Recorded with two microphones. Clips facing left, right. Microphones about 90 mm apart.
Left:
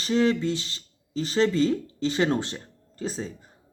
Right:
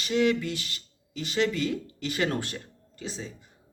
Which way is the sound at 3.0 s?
40° left (ahead or behind).